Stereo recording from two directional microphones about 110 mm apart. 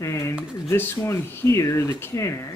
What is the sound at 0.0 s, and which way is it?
A man's voice, 25° left (ahead or behind).